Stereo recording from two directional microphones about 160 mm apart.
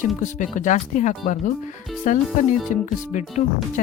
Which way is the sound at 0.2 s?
50° left (ahead or behind).